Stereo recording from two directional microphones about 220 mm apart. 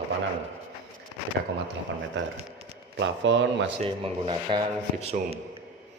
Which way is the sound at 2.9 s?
55° right (ahead or behind).